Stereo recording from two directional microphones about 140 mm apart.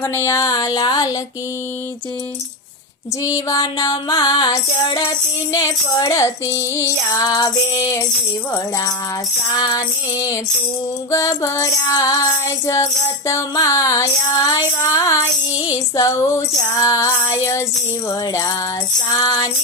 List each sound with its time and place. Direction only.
0.3 s music: 25° left (ahead or behind)
3.2 s music: 25° left (ahead or behind)
9.6 s music: 25° left (ahead or behind)